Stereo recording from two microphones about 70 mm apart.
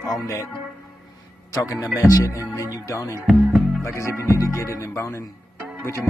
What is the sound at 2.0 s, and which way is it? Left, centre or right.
Speech, left.